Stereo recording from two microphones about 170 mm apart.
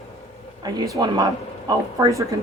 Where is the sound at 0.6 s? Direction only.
20° right (ahead or behind).